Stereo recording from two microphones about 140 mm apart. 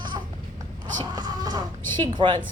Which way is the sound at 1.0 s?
30° right (ahead or behind).